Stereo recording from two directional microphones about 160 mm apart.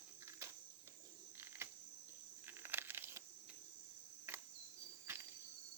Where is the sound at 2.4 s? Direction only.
15° right (ahead or behind).